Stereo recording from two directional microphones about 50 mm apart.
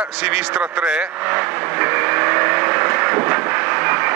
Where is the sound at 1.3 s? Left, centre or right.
Right.